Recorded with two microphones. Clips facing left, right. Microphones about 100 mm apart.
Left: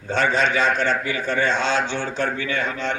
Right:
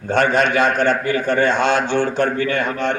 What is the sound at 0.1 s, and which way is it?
A man's voice, 55° right (ahead or behind).